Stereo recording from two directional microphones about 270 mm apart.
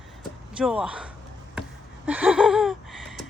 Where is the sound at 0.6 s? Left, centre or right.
Centre.